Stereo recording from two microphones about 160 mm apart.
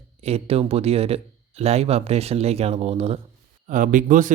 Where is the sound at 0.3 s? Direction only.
40° right (ahead or behind).